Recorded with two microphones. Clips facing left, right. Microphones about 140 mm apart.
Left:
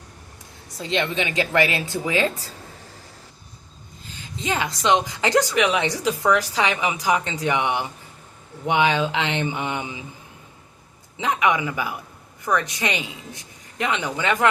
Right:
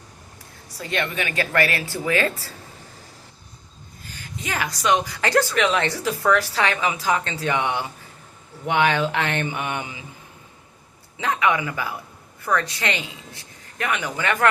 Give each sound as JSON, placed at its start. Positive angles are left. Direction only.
{"t": 0.8, "sound": "a woman's voice", "side_deg": 20}
{"t": 4.1, "sound": "a woman's voice", "side_deg": 20}
{"t": 11.2, "sound": "a woman's voice", "side_deg": 20}